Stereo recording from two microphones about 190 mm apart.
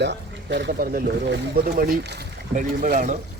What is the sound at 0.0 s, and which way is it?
Speech, 65° right (ahead or behind).